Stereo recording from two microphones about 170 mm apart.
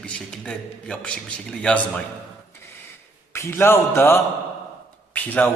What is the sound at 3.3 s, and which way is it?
A man's voice, 15° left (ahead or behind).